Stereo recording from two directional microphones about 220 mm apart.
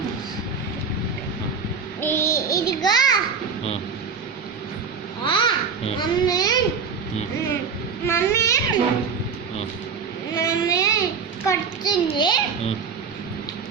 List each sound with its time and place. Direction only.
2.0 s child singing: 10° left (ahead or behind)
5.2 s babbling: 20° left (ahead or behind)
8.0 s babbling: 10° left (ahead or behind)
10.3 s child singing: 15° left (ahead or behind)
11.4 s a sound: 20° left (ahead or behind)